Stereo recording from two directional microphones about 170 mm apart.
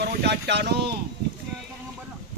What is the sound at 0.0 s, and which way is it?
Speech, 75° right (ahead or behind).